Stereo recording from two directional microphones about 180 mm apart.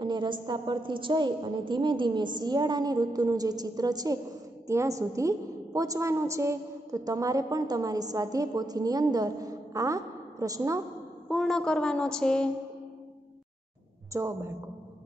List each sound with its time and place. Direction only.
0.0 s a woman's voice: 25° right (ahead or behind)
11.2 s a woman's voice: centre (ahead or behind)
14.1 s a woman's voice: 15° right (ahead or behind)